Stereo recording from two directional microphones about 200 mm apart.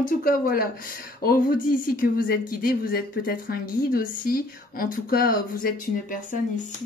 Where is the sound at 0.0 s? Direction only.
45° left (ahead or behind).